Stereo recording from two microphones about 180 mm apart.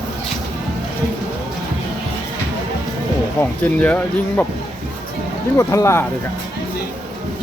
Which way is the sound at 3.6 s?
10° left (ahead or behind).